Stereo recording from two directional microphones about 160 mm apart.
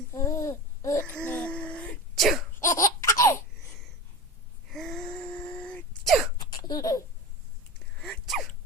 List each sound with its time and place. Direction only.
0.1 s babbling: 20° left (ahead or behind)
1.1 s sneeze: 10° left (ahead or behind)
2.6 s laughter: 20° left (ahead or behind)
4.7 s sneeze: centre (ahead or behind)
6.4 s laughter: 25° left (ahead or behind)
8.0 s sneeze: centre (ahead or behind)